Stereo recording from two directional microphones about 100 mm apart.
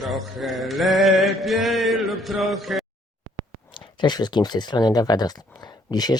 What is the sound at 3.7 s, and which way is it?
Speech, 50° left (ahead or behind).